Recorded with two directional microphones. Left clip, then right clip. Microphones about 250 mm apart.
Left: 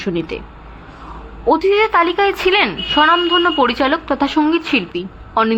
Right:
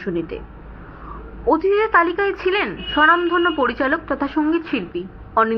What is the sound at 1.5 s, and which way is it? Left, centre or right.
A woman's voice, left.